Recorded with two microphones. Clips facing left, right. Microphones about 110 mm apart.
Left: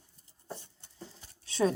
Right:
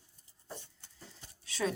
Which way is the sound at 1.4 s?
30° left (ahead or behind).